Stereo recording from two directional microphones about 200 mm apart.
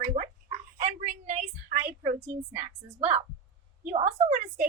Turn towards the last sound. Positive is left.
turn(degrees=-40)  # may be behind; listen again after turning